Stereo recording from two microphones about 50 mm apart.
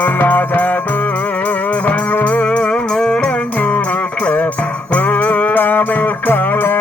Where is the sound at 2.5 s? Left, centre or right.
Centre.